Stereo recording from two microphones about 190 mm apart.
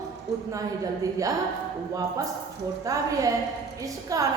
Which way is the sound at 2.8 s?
15° right (ahead or behind).